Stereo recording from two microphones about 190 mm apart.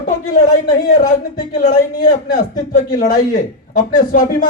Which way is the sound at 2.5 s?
45° left (ahead or behind).